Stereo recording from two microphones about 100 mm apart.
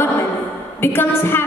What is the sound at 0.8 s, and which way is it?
Speech, 25° left (ahead or behind).